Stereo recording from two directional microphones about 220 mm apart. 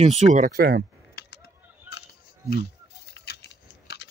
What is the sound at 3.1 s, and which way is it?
Keys jangling, 50° left (ahead or behind).